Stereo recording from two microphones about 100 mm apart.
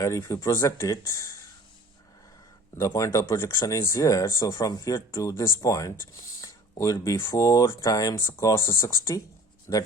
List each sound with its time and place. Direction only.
0.0 s speech: 30° left (ahead or behind)
2.7 s speech: 30° left (ahead or behind)